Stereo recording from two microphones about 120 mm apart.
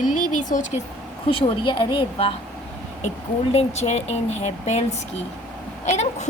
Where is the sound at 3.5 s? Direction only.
65° left (ahead or behind).